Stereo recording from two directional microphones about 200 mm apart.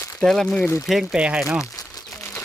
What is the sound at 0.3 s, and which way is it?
Speech, 5° left (ahead or behind).